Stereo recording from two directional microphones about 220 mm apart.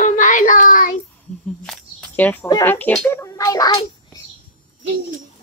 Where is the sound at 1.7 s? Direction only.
5° left (ahead or behind).